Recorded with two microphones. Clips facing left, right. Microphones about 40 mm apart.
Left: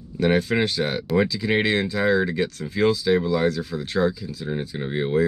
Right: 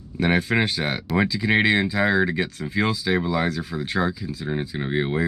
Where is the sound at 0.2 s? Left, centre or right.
Centre.